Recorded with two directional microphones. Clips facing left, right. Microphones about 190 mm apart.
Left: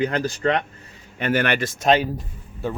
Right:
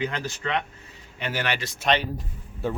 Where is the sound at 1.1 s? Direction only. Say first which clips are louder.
Left 7 dB; 55° left (ahead or behind).